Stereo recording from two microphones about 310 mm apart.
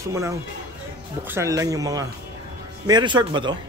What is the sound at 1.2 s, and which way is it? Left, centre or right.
Speech, centre.